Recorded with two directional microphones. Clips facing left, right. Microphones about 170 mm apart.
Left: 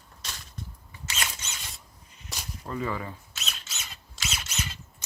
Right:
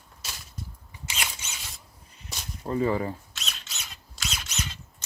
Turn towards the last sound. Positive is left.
turn(degrees=5)  # may be behind; listen again after turning